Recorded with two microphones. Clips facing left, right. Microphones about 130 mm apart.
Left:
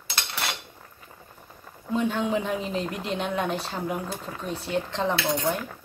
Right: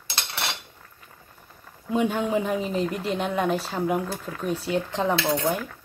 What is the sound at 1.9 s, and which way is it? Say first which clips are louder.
Speech: right 2 dB; 10° right (ahead or behind).